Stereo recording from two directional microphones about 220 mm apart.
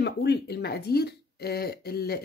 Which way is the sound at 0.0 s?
50° left (ahead or behind).